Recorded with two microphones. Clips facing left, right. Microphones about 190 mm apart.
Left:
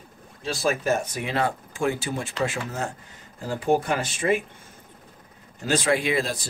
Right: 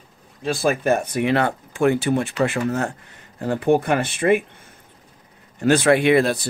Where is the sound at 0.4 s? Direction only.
55° right (ahead or behind).